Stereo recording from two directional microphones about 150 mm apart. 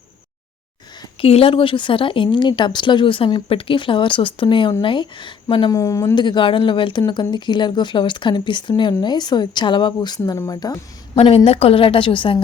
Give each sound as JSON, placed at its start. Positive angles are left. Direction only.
{"t": 1.2, "sound": "speech", "side_deg": 40}
{"t": 5.7, "sound": "speech", "side_deg": 20}
{"t": 11.1, "sound": "speech", "side_deg": 40}